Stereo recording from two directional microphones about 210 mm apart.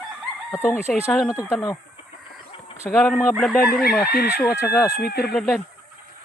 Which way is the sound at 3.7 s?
45° left (ahead or behind).